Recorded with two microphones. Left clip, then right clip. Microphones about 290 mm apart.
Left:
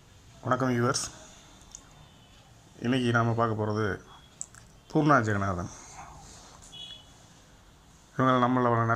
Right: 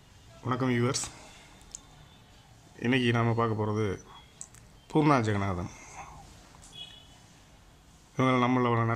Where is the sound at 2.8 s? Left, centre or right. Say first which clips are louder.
Left 1 dB; centre.